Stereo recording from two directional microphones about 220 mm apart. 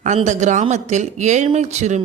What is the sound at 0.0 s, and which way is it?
A woman's voice, 35° right (ahead or behind).